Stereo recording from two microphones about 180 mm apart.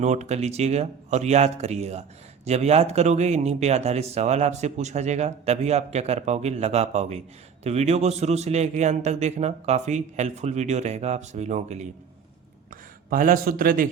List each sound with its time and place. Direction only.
0.0 s speech: 40° right (ahead or behind)